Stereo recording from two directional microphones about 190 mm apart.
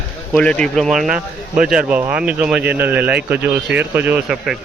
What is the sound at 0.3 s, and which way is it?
A man's voice, 5° left (ahead or behind).